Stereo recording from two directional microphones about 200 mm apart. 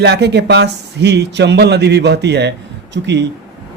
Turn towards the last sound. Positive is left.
turn(degrees=-60)  # may be behind; listen again after turning